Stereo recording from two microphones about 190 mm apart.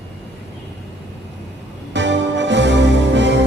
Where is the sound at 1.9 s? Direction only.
70° right (ahead or behind).